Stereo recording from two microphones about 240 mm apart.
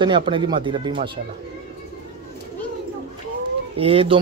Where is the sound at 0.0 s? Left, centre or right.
Right.